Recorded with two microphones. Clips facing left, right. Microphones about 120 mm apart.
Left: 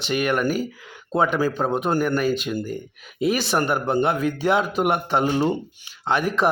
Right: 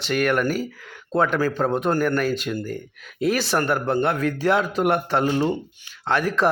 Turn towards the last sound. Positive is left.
turn(degrees=20)  # may be behind; listen again after turning